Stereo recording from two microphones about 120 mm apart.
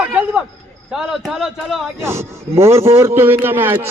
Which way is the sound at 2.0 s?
20° right (ahead or behind).